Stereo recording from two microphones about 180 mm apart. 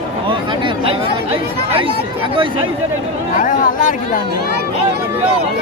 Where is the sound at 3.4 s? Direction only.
50° left (ahead or behind).